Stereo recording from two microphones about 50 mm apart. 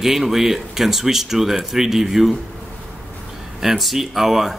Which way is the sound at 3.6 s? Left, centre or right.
Centre.